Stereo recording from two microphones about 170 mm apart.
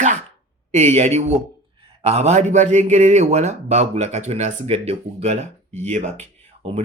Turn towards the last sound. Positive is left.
turn(degrees=-45)  # may be behind; listen again after turning